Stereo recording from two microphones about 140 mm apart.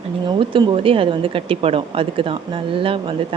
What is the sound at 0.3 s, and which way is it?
A woman's voice, 35° right (ahead or behind).